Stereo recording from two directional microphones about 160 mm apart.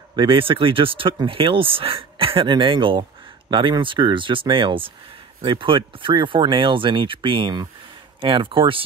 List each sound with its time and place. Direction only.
0.1 s speech: 30° right (ahead or behind)